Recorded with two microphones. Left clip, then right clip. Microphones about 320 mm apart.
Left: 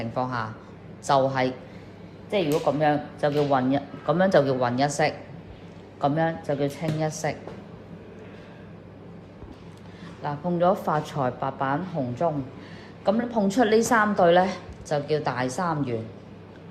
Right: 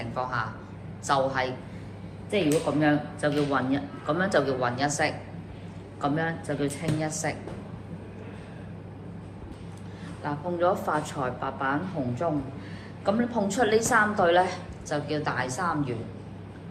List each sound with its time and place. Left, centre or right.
0.0 s a man's voice: left
2.8 s a woman's voice: left
10.2 s a woman's voice: left